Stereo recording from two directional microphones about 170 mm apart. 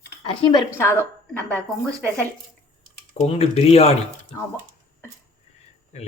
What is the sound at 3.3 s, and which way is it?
Speech, 35° left (ahead or behind).